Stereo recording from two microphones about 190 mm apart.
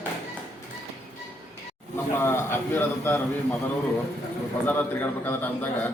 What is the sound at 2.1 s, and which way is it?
A man's voice, 10° left (ahead or behind).